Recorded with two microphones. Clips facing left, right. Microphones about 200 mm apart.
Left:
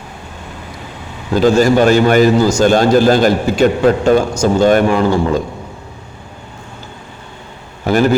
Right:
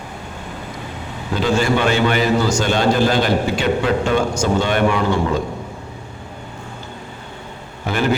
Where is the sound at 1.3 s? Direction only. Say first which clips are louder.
Left 7 dB; 40° left (ahead or behind).